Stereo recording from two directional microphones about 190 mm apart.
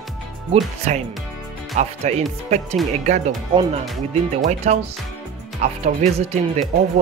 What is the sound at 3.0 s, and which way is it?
Speech, 40° right (ahead or behind).